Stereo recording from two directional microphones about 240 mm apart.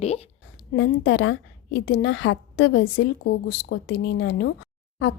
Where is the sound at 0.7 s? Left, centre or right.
Left.